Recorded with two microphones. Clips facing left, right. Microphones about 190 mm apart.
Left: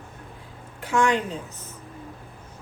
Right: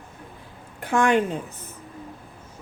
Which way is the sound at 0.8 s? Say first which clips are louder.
Right 2 dB; 55° right (ahead or behind).